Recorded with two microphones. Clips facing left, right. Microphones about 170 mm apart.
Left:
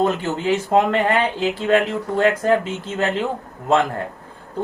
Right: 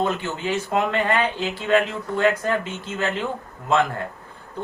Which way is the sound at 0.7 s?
40° left (ahead or behind).